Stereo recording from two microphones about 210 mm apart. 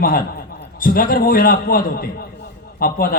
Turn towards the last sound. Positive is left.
turn(degrees=45)  # may be behind; listen again after turning